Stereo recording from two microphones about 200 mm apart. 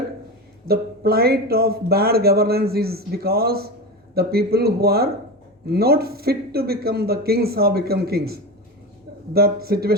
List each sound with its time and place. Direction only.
0.7 s speech: 50° right (ahead or behind)